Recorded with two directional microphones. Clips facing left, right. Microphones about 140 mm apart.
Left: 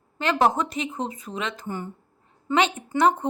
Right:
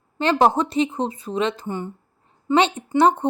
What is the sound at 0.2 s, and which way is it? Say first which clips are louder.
Speech: right 4 dB; 30° right (ahead or behind).